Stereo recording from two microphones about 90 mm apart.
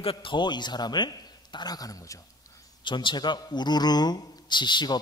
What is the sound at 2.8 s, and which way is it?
Speech, 60° left (ahead or behind).